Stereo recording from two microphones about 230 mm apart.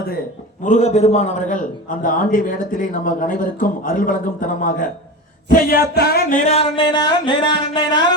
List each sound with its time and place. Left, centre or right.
0.6 s a man's voice: left
5.9 s a sound: left
6.4 s speech: left